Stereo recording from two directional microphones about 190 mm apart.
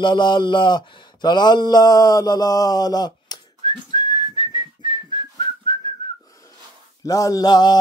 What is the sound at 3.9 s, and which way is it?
Whistling, 20° left (ahead or behind).